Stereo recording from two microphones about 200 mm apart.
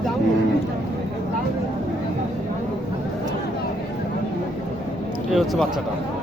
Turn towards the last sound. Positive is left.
turn(degrees=0)  # may be behind; listen again after turning